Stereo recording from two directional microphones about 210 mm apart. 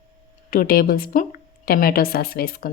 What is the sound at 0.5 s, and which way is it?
Speech, 45° left (ahead or behind).